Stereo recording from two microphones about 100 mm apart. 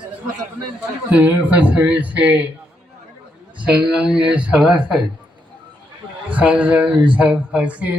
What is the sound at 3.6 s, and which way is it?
Speech, 10° right (ahead or behind).